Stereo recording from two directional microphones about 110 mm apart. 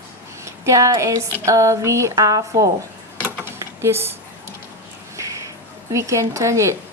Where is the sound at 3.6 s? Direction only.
25° right (ahead or behind).